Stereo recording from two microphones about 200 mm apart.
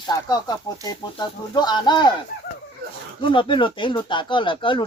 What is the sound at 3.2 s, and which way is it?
Speech, 25° left (ahead or behind).